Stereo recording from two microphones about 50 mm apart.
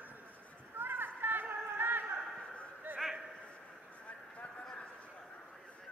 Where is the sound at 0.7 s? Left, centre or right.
Right.